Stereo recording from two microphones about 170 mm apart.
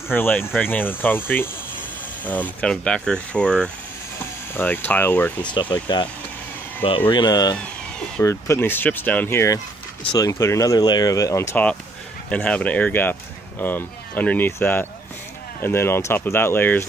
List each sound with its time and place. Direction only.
0.1 s speech: 10° left (ahead or behind)
5.5 s speech: 25° left (ahead or behind)
7.1 s speech: 25° left (ahead or behind)